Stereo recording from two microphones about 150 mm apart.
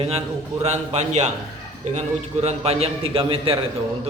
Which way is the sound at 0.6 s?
45° right (ahead or behind).